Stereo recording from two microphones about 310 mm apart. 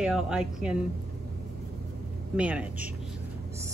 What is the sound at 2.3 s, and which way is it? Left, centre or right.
Speech, centre.